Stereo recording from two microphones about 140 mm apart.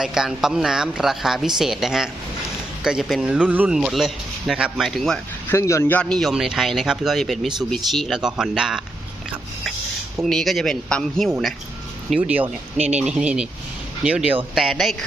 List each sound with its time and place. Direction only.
0.0 s a man's voice: 5° right (ahead or behind)
5.5 s a man's voice: 20° left (ahead or behind); by 8.8 s 5° right (ahead or behind)
10.2 s a man's voice: centre (ahead or behind)
12.7 s a man's voice: 55° right (ahead or behind)
13.0 s a man's voice: 5° right (ahead or behind)